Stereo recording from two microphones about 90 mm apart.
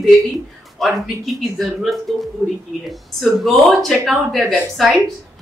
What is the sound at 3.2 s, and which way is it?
A woman's voice, centre (ahead or behind).